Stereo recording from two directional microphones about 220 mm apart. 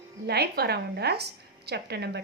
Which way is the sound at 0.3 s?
45° right (ahead or behind).